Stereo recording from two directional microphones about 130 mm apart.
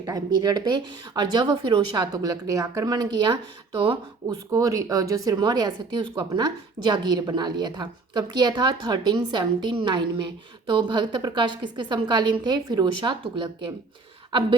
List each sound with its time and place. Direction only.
0.0 s speech: 30° right (ahead or behind)
4.5 s speech: 25° right (ahead or behind)